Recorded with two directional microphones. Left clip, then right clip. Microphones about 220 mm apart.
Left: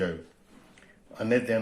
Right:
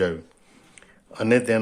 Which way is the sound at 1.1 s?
40° right (ahead or behind).